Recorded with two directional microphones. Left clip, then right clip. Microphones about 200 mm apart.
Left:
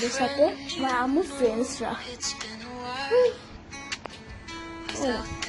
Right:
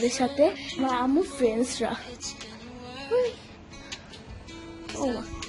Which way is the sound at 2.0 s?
Centre (ahead or behind).